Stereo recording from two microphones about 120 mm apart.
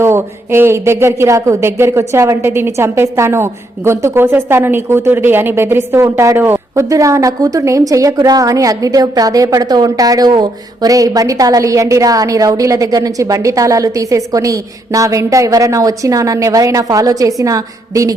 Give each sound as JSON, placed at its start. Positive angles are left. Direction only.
{"t": 0.0, "sound": "speech", "side_deg": -20}